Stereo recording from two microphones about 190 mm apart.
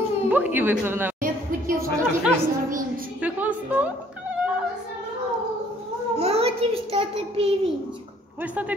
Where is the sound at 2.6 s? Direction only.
45° right (ahead or behind).